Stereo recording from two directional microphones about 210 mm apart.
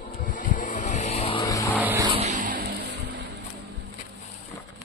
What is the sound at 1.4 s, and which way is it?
Vehicle, 15° left (ahead or behind).